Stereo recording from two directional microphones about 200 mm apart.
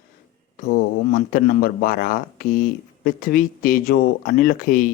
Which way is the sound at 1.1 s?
45° left (ahead or behind).